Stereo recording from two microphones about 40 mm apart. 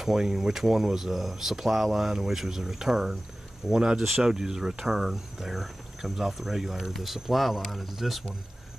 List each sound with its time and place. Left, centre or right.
0.0 s speech: centre